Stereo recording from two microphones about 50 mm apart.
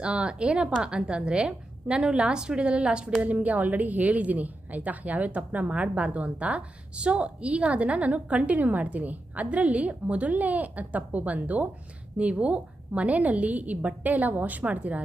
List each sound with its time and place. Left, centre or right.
0.0 s a woman's voice: right